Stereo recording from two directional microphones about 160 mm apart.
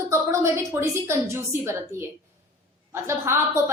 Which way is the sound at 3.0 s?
15° right (ahead or behind).